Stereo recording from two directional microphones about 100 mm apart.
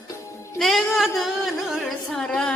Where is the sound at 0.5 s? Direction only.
Centre (ahead or behind).